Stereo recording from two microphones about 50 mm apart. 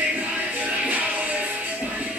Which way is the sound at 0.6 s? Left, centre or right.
Right.